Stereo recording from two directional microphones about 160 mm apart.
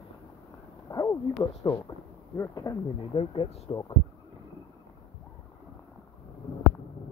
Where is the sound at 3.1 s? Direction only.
35° left (ahead or behind).